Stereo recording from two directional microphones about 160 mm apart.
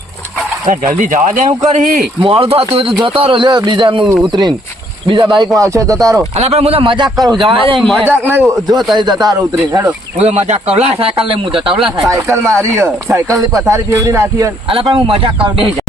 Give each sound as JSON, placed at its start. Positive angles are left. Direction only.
{"t": 0.7, "sound": "speech", "side_deg": -55}
{"t": 2.2, "sound": "a man's voice", "side_deg": -35}
{"t": 6.3, "sound": "a man's voice", "side_deg": -40}
{"t": 7.8, "sound": "speech", "side_deg": 0}
{"t": 8.0, "sound": "speech", "side_deg": -10}
{"t": 9.0, "sound": "a man's voice", "side_deg": -25}
{"t": 10.2, "sound": "a man's voice", "side_deg": -45}
{"t": 11.7, "sound": "speech", "side_deg": -5}
{"t": 12.0, "sound": "a man's voice", "side_deg": -20}
{"t": 14.7, "sound": "a man's voice", "side_deg": -35}